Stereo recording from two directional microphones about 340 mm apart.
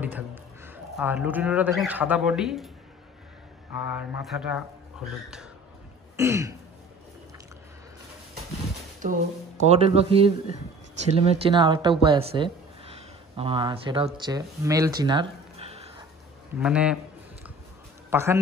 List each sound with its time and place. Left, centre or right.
0.0 s speech: centre
3.9 s speech: centre
6.1 s speech: centre
9.0 s speech: right
15.5 s a sound: centre
16.5 s speech: centre
18.1 s speech: centre